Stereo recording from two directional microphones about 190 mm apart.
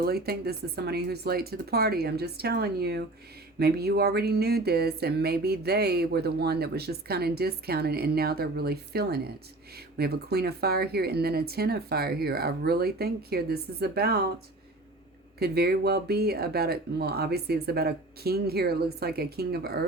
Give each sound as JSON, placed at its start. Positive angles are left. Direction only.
{"t": 0.0, "sound": "speech", "side_deg": -55}